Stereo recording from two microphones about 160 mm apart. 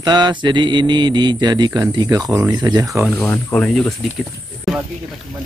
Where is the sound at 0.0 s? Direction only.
25° right (ahead or behind).